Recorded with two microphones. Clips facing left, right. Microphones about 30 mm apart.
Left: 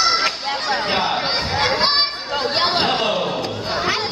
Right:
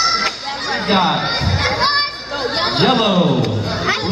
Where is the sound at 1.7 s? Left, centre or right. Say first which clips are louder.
Right 3 dB; centre.